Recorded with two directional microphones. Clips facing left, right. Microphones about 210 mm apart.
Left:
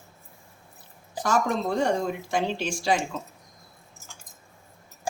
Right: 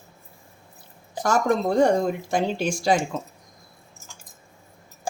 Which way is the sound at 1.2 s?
40° right (ahead or behind).